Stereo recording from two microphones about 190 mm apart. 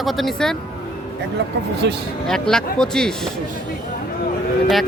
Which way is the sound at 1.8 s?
70° right (ahead or behind).